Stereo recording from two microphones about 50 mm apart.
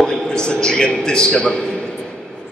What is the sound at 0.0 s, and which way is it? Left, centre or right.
A man's voice, centre.